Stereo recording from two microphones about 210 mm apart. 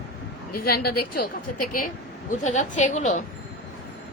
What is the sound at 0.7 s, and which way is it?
Speech, 45° left (ahead or behind).